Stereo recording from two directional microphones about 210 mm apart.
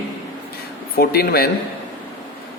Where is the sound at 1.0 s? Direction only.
45° left (ahead or behind).